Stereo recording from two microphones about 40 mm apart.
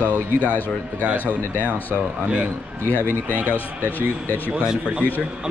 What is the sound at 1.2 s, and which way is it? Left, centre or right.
Speech, left.